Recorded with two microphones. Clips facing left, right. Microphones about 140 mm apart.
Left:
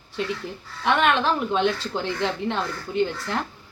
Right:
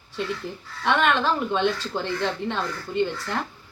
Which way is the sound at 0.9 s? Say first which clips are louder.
Left 1 dB; 5° left (ahead or behind).